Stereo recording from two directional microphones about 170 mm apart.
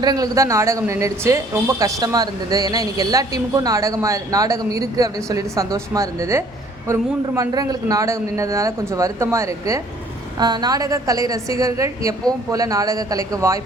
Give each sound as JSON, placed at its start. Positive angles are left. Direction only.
{"t": 0.0, "sound": "speech", "side_deg": -20}